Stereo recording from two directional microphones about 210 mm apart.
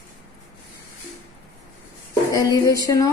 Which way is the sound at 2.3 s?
15° left (ahead or behind).